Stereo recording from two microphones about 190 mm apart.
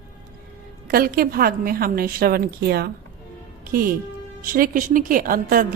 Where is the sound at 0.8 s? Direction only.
50° right (ahead or behind).